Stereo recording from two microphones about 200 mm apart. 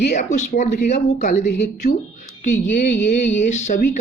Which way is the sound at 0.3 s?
40° left (ahead or behind).